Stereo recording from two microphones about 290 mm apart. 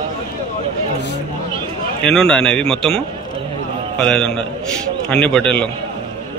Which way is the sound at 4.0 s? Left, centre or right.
Centre.